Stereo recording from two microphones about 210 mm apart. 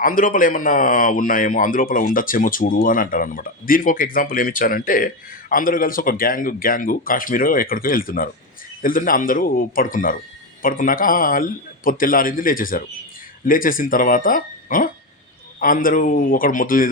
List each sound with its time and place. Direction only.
0.0 s a man's voice: 40° left (ahead or behind)